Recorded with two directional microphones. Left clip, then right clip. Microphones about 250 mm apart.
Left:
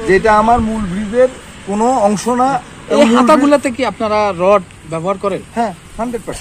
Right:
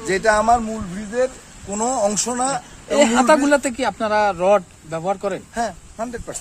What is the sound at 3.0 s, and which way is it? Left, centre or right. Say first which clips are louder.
Speech: left 5 dB; right.